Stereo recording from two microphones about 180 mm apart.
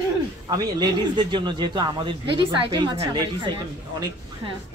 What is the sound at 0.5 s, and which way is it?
Speech, 20° right (ahead or behind).